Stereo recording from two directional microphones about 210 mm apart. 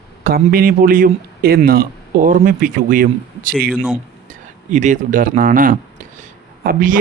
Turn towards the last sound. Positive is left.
turn(degrees=-40)  # may be behind; listen again after turning